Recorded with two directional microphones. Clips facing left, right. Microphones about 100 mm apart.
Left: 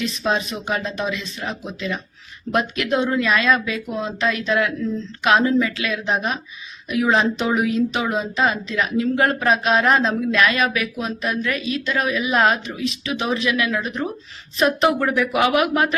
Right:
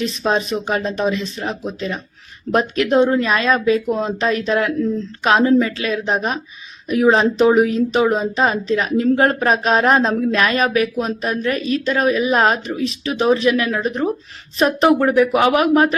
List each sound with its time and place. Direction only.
0.0 s speech: 40° right (ahead or behind)